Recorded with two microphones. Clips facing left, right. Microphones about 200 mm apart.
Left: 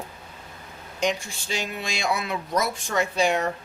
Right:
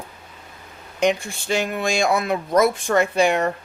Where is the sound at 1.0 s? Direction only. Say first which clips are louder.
Right 6 dB; 55° right (ahead or behind).